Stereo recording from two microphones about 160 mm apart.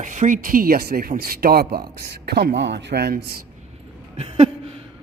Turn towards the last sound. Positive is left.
turn(degrees=-40)  # may be behind; listen again after turning